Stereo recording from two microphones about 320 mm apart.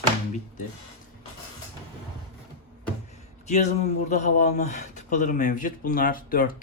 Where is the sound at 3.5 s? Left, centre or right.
Left.